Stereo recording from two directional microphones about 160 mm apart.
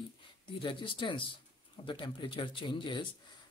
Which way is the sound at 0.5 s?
30° left (ahead or behind).